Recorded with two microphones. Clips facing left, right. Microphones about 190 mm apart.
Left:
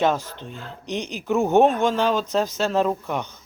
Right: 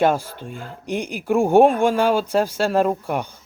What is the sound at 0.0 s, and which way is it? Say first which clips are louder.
Speech: right 3 dB; 10° right (ahead or behind).